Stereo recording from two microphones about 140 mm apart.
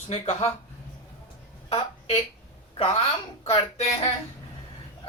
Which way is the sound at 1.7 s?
45° left (ahead or behind).